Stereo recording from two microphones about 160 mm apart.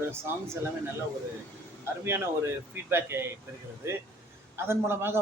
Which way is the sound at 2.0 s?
15° right (ahead or behind).